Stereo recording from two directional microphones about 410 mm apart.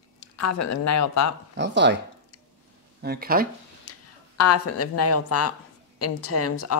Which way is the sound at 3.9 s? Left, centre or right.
Left.